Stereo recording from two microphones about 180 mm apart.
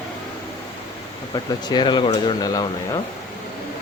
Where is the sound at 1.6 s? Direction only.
25° left (ahead or behind).